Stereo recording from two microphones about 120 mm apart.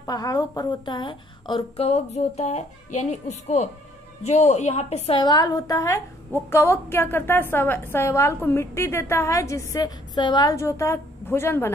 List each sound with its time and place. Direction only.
0.0 s a woman's voice: 30° left (ahead or behind)
1.9 s a woman's voice: 65° left (ahead or behind)
5.1 s a woman's voice: 35° left (ahead or behind)
10.5 s a woman's voice: 25° left (ahead or behind)